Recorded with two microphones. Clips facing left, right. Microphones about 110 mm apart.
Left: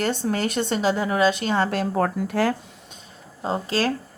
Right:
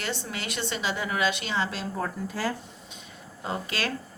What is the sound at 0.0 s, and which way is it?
A woman's voice, 45° left (ahead or behind).